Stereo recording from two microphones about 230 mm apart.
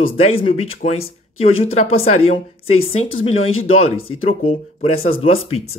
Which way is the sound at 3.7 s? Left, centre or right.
Left.